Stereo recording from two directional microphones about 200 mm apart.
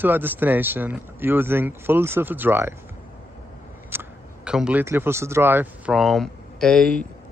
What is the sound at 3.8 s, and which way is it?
Speech, 10° right (ahead or behind).